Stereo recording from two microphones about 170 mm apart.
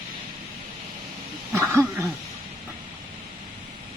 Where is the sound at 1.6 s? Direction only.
15° right (ahead or behind).